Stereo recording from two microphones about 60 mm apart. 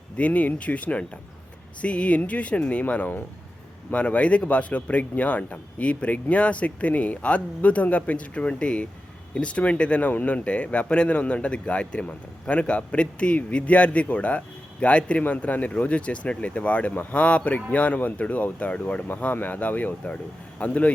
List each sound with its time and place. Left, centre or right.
0.2 s a man's voice: left